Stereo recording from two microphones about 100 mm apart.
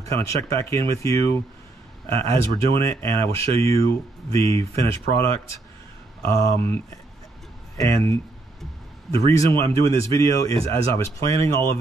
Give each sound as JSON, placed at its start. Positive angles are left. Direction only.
{"t": 0.1, "sound": "speech", "side_deg": 30}
{"t": 2.5, "sound": "speech", "side_deg": 30}